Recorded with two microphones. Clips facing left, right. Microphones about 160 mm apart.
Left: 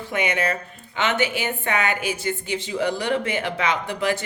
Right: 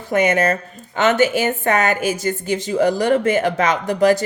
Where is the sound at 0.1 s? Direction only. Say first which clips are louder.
Right 8 dB; 45° right (ahead or behind).